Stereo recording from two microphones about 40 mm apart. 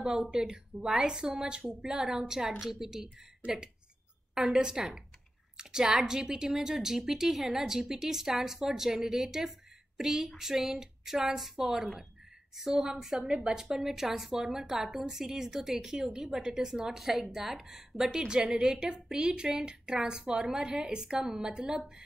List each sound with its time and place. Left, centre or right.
0.3 s a woman's voice: centre
18.5 s a woman's voice: centre
18.8 s a woman's voice: right